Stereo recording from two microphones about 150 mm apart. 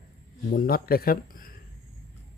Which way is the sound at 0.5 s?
80° left.